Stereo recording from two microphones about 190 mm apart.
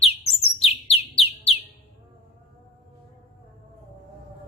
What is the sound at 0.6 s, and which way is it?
Bird, 30° left (ahead or behind).